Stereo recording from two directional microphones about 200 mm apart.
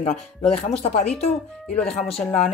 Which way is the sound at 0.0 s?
30° left (ahead or behind).